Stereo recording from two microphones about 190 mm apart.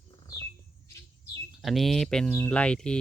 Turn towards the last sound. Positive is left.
turn(degrees=5)  # may be behind; listen again after turning